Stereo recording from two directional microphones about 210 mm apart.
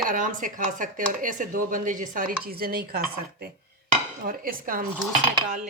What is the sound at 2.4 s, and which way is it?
Dishes, 45° right (ahead or behind).